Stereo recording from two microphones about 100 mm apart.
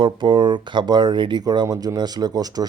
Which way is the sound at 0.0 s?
55° right (ahead or behind).